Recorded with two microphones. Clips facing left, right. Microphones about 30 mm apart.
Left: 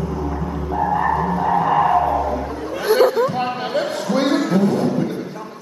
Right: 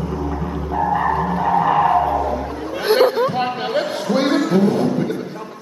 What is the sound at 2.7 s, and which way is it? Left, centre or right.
Chatter, right.